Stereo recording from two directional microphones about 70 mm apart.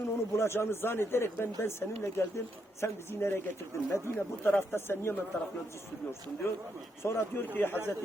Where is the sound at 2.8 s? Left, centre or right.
Left.